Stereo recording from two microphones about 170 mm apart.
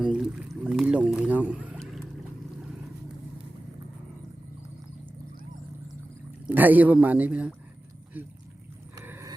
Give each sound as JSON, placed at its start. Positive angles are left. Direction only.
{"t": 0.0, "sound": "boat", "side_deg": -5}
{"t": 6.5, "sound": "a man's voice", "side_deg": -10}
{"t": 9.0, "sound": "wild animals", "side_deg": -15}